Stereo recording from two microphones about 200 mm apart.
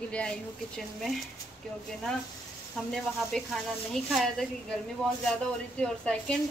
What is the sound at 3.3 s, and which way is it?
A man's voice, 5° left (ahead or behind).